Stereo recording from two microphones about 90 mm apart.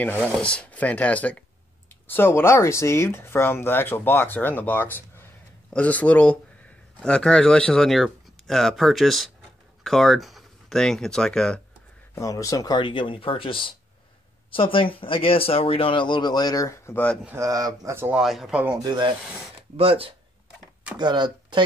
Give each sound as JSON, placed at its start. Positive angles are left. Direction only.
{"t": 0.4, "sound": "speech", "side_deg": 15}
{"t": 12.2, "sound": "speech", "side_deg": 40}
{"t": 12.7, "sound": "speech", "side_deg": 60}
{"t": 17.4, "sound": "speech", "side_deg": -45}
{"t": 18.1, "sound": "speech", "side_deg": -5}
{"t": 18.8, "sound": "speech", "side_deg": -55}
{"t": 19.8, "sound": "speech", "side_deg": -90}
{"t": 21.0, "sound": "speech", "side_deg": -55}